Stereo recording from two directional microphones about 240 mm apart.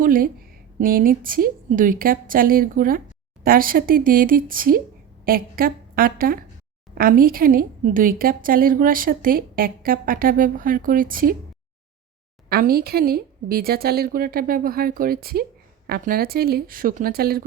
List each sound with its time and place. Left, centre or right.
0.0 s a woman's voice: right
12.5 s a woman's voice: right